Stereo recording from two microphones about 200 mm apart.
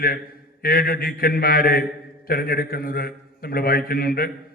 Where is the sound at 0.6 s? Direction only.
50° left (ahead or behind).